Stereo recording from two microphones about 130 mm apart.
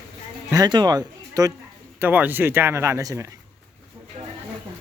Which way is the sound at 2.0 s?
15° right (ahead or behind).